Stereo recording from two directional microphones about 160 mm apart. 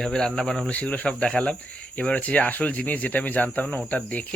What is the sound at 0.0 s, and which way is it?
Speech, 5° left (ahead or behind).